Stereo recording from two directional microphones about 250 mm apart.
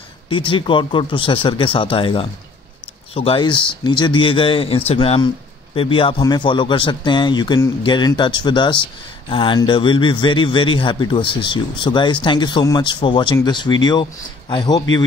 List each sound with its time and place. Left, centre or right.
0.3 s a man's voice: centre